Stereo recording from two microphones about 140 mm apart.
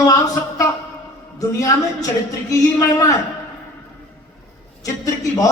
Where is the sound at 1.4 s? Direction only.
25° left (ahead or behind).